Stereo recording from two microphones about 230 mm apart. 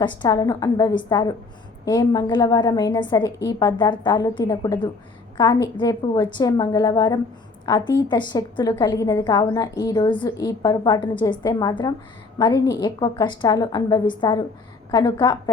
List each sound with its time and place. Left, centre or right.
0.0 s a woman's voice: centre